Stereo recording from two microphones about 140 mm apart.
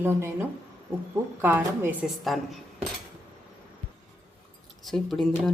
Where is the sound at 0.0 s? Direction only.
15° right (ahead or behind).